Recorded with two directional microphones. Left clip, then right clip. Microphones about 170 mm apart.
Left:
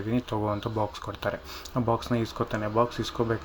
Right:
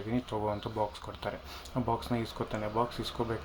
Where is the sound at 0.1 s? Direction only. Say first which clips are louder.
Left 4 dB; 15° left (ahead or behind).